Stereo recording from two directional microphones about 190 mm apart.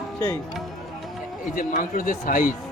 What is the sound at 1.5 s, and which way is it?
A man's voice, 45° left (ahead or behind).